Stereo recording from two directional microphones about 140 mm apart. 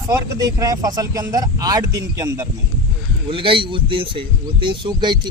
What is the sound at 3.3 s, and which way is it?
Speech, 40° right (ahead or behind).